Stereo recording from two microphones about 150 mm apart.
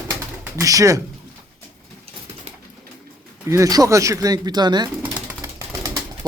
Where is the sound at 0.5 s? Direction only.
20° right (ahead or behind).